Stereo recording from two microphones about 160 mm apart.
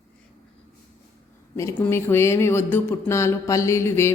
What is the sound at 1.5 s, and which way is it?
Speech, 15° left (ahead or behind).